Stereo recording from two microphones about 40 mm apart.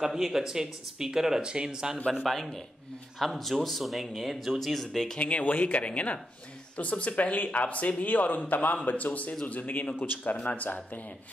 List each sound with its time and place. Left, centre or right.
0.0 s speech: centre
2.2 s speech: centre
4.7 s speech: centre
5.2 s a man's voice: left